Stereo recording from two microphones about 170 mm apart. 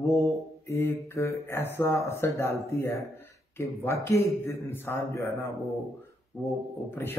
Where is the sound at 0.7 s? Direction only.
15° left (ahead or behind).